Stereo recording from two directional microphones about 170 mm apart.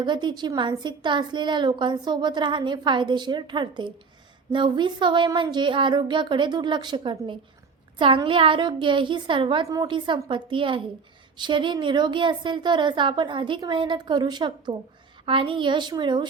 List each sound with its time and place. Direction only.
0.0 s a woman's voice: 25° right (ahead or behind)